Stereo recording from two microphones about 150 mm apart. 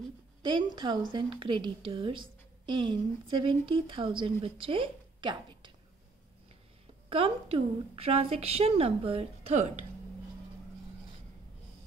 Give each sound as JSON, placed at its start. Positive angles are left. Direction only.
{"t": 0.4, "sound": "a woman's voice", "side_deg": -30}
{"t": 7.1, "sound": "a woman's voice", "side_deg": -35}